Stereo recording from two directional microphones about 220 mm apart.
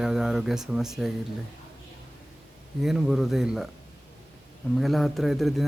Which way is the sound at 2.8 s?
Centre (ahead or behind).